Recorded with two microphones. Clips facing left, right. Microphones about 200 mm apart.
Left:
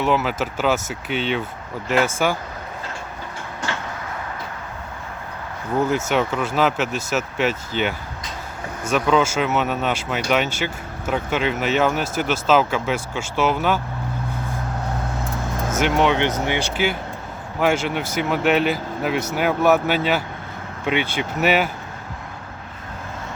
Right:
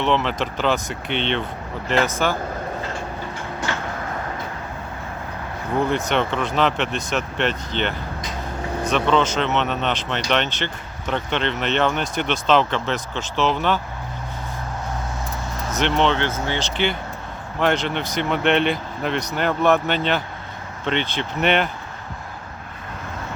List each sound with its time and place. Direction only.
0.0 s speech: 5° left (ahead or behind)
6.1 s speech: 5° left (ahead or behind)
15.8 s speech: 10° left (ahead or behind)